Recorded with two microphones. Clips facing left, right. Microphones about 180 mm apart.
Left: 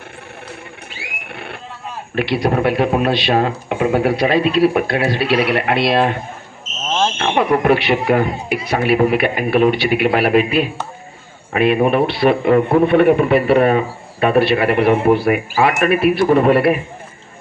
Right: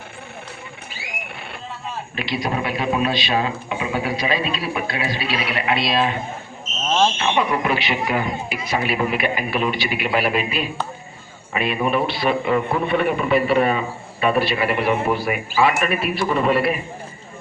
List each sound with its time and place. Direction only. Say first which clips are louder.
2.1 s speech: left 8 dB; 65° left (ahead or behind)
7.2 s speech: left 5 dB; 55° left (ahead or behind)